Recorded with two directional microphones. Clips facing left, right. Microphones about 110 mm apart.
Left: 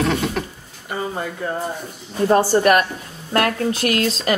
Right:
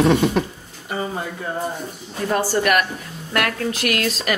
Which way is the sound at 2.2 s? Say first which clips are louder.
Left 5 dB; 30° left (ahead or behind).